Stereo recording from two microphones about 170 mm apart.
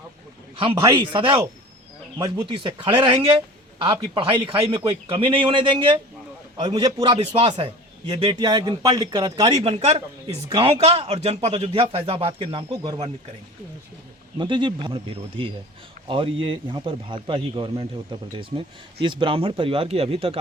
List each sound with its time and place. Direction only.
0.5 s speech: 30° right (ahead or behind)
9.7 s speech: 40° right (ahead or behind)
14.3 s speech: 30° right (ahead or behind)